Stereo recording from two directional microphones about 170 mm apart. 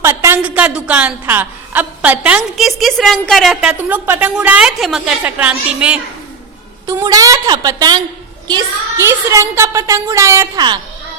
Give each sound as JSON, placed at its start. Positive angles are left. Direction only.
{"t": 0.0, "sound": "a woman's voice", "side_deg": -15}
{"t": 6.8, "sound": "a woman's voice", "side_deg": -20}